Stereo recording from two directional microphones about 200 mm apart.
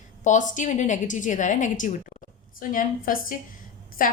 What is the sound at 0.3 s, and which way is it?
A woman's voice, 40° left (ahead or behind).